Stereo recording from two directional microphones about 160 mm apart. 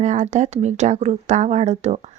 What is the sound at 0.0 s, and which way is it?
Speech, 50° right (ahead or behind).